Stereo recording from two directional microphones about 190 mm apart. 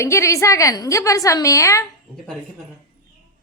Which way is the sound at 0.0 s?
15° left (ahead or behind).